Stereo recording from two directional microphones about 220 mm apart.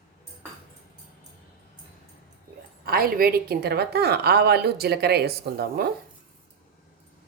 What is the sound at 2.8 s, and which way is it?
A woman's voice, 45° right (ahead or behind).